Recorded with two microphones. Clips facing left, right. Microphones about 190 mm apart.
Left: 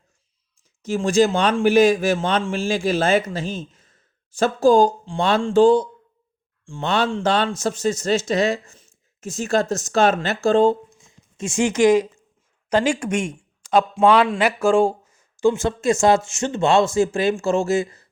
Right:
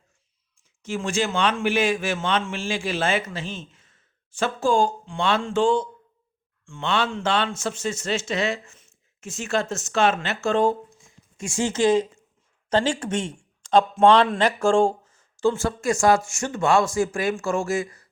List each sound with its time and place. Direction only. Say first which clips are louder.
0.8 s a man's voice: left 8 dB; 40° left (ahead or behind)